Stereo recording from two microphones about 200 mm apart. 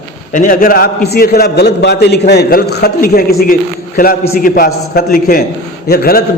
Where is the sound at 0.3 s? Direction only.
40° left (ahead or behind).